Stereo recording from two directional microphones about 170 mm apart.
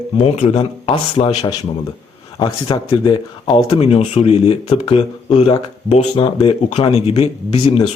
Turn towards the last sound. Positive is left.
turn(degrees=35)  # may be behind; listen again after turning